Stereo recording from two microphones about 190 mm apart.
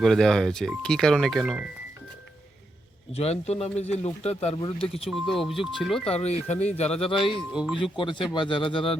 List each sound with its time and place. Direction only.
0.0 s speech: centre (ahead or behind)
3.1 s a man's voice: 35° left (ahead or behind)
5.1 s speech: centre (ahead or behind)
6.2 s a man's voice: 35° left (ahead or behind)
7.2 s speech: centre (ahead or behind)
7.8 s speech: 25° left (ahead or behind)